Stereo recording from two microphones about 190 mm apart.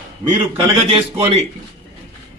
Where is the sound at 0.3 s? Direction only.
30° right (ahead or behind).